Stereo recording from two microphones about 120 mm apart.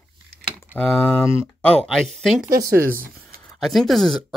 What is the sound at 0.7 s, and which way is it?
Speech, 15° left (ahead or behind).